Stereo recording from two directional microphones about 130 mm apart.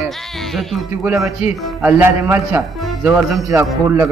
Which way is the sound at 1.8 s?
15° right (ahead or behind).